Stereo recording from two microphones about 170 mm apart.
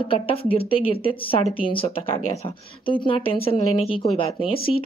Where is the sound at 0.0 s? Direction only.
30° left (ahead or behind).